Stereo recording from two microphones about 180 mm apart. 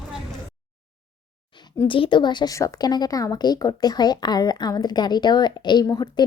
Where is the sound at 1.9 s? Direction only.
25° left (ahead or behind).